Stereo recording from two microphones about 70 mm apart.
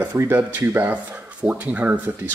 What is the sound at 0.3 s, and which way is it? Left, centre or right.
Speech, right.